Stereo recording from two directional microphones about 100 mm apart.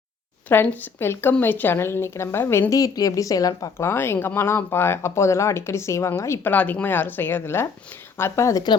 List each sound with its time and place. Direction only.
0.4 s a woman's voice: 20° left (ahead or behind); by 3.8 s 35° left (ahead or behind)
3.8 s a woman's voice: 25° left (ahead or behind)
6.5 s a woman's voice: 15° left (ahead or behind); by 8.6 s 30° left (ahead or behind)